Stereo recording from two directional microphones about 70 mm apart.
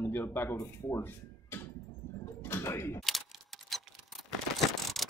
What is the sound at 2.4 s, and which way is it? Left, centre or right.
Door, left.